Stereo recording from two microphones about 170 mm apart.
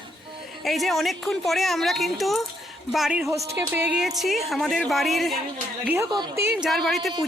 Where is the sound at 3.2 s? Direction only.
20° right (ahead or behind); by 5.4 s centre (ahead or behind).